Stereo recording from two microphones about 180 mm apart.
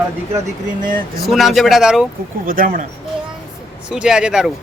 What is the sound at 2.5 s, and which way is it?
Speech, 50° right (ahead or behind).